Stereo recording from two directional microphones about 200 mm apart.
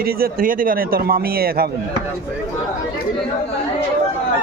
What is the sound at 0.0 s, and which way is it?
Speech, 45° right (ahead or behind).